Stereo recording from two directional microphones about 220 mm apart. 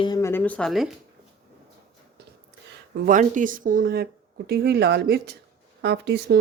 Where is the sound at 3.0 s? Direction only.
35° right (ahead or behind).